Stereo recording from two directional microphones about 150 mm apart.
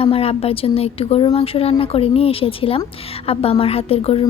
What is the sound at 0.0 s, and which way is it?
A woman's voice, 40° left (ahead or behind).